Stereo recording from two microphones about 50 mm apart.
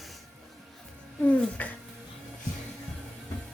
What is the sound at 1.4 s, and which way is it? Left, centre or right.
Speech, left.